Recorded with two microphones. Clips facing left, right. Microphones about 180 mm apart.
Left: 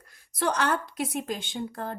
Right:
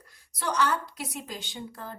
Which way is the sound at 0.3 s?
55° left (ahead or behind).